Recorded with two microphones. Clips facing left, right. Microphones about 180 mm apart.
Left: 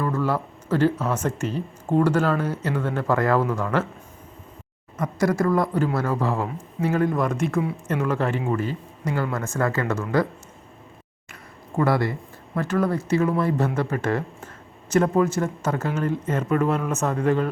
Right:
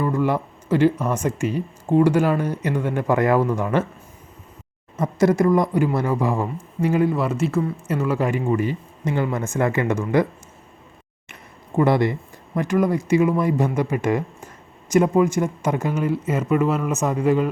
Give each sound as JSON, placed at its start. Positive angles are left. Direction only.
{"t": 0.0, "sound": "speech", "side_deg": -15}
{"t": 4.9, "sound": "speech", "side_deg": -25}
{"t": 11.8, "sound": "speech", "side_deg": -20}